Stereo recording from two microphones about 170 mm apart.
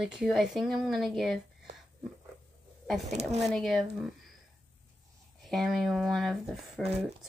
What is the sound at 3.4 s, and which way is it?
Speech, centre (ahead or behind).